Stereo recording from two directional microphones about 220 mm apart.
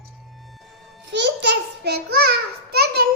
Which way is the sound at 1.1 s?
50° right (ahead or behind).